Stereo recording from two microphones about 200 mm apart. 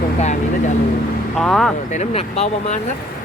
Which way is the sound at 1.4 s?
Centre (ahead or behind).